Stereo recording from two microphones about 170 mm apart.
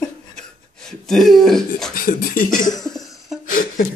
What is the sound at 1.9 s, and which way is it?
Beatboxing, 55° left (ahead or behind).